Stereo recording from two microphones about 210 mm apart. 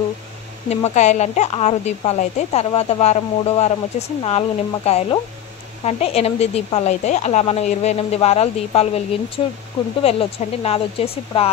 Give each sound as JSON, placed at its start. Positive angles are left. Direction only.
{"t": 0.7, "sound": "a woman's voice", "side_deg": 35}
{"t": 10.0, "sound": "speech", "side_deg": 30}